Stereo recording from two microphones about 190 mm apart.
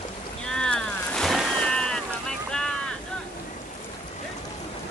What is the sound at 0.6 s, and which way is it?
Boat, 5° left (ahead or behind).